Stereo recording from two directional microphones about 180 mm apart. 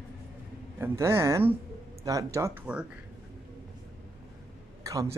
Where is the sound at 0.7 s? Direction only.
15° right (ahead or behind).